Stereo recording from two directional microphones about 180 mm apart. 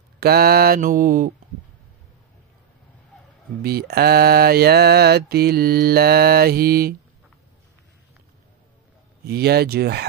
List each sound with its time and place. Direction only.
0.2 s mantra: 60° right (ahead or behind)
3.6 s mantra: 60° right (ahead or behind)
9.2 s mantra: 60° right (ahead or behind)